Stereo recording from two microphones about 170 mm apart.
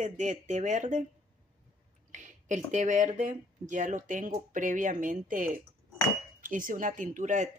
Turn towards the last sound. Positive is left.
turn(degrees=-45)  # may be behind; listen again after turning